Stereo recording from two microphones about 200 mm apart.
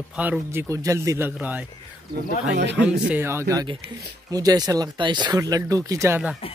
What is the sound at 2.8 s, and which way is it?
Speech, 5° right (ahead or behind).